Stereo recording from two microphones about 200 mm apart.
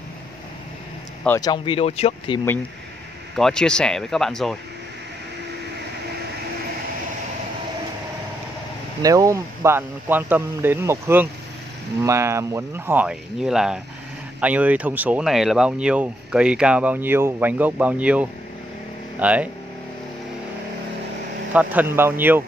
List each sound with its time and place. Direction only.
1.2 s speech: 10° left (ahead or behind)
1.5 s speech: 30° left (ahead or behind)
3.3 s speech: centre (ahead or behind)
9.0 s speech: 15° right (ahead or behind)
21.5 s speech: 10° right (ahead or behind)